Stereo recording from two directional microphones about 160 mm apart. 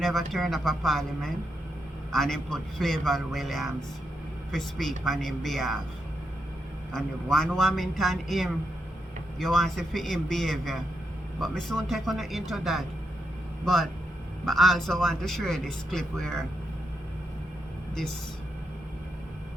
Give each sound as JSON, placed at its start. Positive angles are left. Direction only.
{"t": 0.0, "sound": "speech", "side_deg": 0}
{"t": 6.9, "sound": "speech", "side_deg": 5}
{"t": 14.4, "sound": "speech", "side_deg": 0}